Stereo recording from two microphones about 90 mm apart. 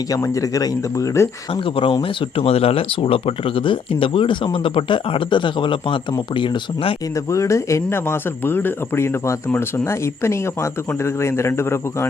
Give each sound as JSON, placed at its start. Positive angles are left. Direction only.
{"t": 0.1, "sound": "speech", "side_deg": 40}
{"t": 1.6, "sound": "speech", "side_deg": 75}
{"t": 7.3, "sound": "speech", "side_deg": 35}